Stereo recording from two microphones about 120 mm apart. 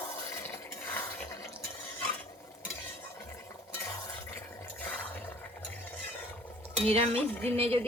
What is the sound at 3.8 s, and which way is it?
Stir, 20° left (ahead or behind).